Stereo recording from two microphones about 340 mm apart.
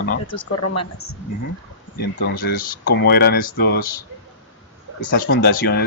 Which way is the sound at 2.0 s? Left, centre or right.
Left.